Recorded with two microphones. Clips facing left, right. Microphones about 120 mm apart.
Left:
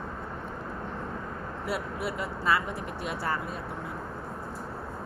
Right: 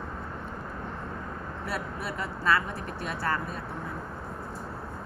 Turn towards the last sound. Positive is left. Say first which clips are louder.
# right 1 dB
turn(degrees=15)  # may be behind; listen again after turning